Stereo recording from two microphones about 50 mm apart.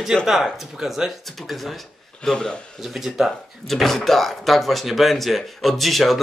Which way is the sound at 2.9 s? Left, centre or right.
Centre.